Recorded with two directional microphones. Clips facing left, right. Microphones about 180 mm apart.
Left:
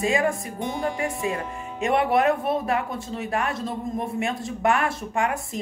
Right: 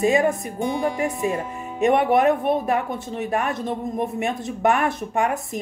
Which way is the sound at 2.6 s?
20° right (ahead or behind).